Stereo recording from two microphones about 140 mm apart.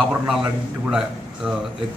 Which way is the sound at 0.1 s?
5° right (ahead or behind).